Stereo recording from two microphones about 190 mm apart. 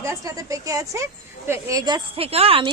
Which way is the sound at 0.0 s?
15° right (ahead or behind).